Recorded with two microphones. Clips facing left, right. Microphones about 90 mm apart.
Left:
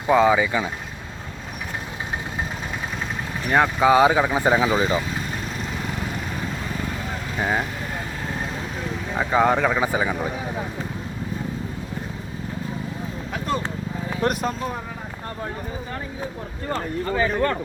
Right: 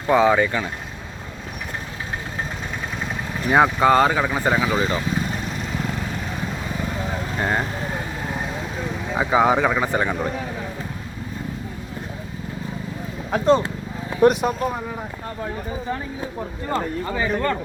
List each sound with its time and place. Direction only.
0.1 s speech: centre (ahead or behind)
3.4 s speech: 5° right (ahead or behind)
3.8 s speech: 10° left (ahead or behind)
7.3 s speech: centre (ahead or behind)
9.1 s speech: 5° right (ahead or behind)
13.3 s a sound: 30° right (ahead or behind)
14.2 s speech: 15° right (ahead or behind)
16.7 s speech: 5° right (ahead or behind)